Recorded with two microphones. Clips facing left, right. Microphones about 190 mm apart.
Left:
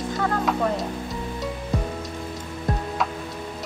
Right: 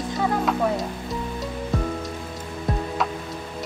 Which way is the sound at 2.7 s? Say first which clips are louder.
Right 1 dB; centre (ahead or behind).